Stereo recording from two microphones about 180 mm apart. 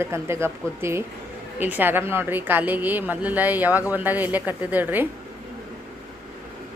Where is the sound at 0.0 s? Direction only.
15° right (ahead or behind).